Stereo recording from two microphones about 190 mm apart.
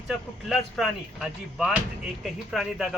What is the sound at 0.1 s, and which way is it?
Speech, centre (ahead or behind).